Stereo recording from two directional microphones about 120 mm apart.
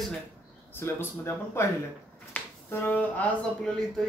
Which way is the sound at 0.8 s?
20° left (ahead or behind).